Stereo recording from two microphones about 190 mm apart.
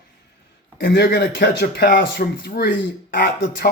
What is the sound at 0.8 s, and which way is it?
Speech, 55° left (ahead or behind).